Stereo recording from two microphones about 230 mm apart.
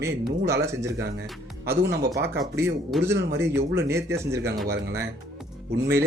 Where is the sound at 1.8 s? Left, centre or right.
Right.